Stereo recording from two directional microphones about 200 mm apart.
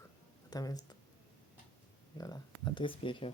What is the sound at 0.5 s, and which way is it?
Speech, 20° left (ahead or behind).